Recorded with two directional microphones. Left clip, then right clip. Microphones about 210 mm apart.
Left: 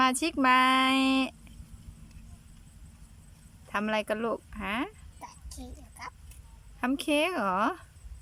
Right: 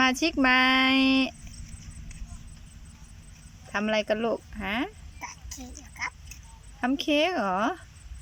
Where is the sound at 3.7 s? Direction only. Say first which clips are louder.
Right 3 dB; centre (ahead or behind).